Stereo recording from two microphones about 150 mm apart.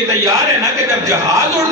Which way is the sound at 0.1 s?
20° right (ahead or behind).